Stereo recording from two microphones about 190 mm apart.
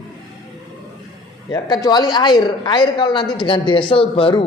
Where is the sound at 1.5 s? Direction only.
20° left (ahead or behind).